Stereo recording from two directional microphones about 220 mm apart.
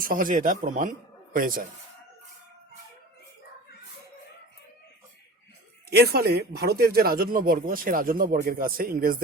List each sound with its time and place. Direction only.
0.0 s speech: 40° right (ahead or behind)
5.9 s speech: 45° right (ahead or behind)